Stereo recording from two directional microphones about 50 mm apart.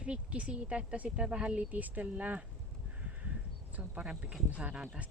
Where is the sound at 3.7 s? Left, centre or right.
Right.